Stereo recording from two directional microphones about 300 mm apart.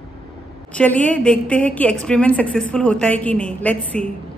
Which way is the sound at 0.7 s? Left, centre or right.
Centre.